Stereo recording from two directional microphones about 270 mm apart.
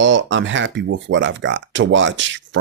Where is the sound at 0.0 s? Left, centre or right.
Right.